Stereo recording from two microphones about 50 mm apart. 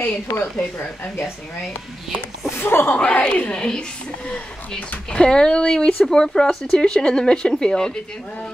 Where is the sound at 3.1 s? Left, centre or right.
Left.